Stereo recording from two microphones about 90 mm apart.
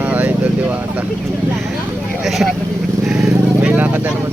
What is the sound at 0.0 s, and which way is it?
Vehicle, 20° right (ahead or behind).